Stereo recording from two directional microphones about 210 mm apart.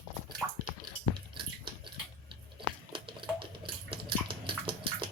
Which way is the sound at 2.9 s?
25° right (ahead or behind).